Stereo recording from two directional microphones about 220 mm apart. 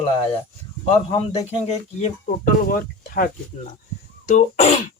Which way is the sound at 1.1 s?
30° left (ahead or behind).